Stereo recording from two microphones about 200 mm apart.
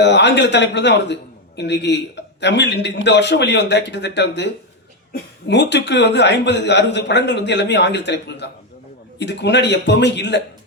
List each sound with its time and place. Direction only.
0.0 s a man's voice: 60° left (ahead or behind)